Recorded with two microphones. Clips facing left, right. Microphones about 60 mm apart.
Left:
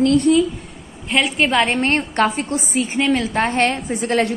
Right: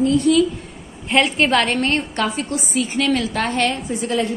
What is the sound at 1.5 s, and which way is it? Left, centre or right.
Speech, centre.